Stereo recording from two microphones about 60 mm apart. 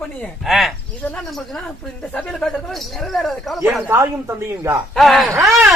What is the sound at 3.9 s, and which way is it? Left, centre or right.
Speech, right.